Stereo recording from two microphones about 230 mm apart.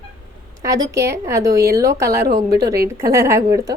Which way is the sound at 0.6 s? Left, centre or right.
Centre.